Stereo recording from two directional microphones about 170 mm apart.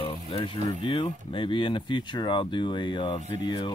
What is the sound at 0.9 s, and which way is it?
Speech, 30° left (ahead or behind).